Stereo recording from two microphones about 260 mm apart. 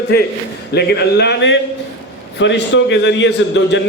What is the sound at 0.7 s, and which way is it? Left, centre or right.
A man's voice, left.